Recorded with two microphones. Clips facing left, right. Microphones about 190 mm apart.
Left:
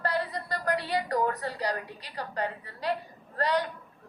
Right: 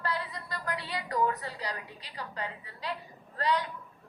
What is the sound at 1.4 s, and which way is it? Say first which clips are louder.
A woman's voice: left 6 dB; 60° left (ahead or behind).